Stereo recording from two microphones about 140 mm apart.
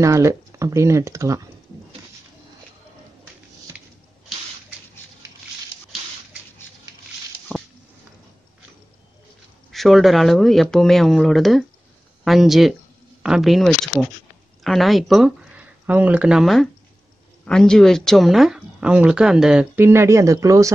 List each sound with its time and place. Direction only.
0.0 s speech: 20° right (ahead or behind)
7.5 s a sound: 10° left (ahead or behind)
9.7 s speech: centre (ahead or behind); by 20.7 s 20° right (ahead or behind)